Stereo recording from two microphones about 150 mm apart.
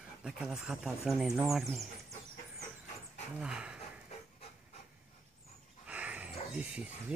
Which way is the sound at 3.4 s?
5° right (ahead or behind).